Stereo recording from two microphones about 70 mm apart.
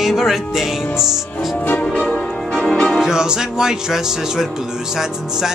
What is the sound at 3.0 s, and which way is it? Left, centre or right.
Music, centre.